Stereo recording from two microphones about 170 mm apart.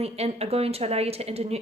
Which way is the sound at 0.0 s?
35° right (ahead or behind).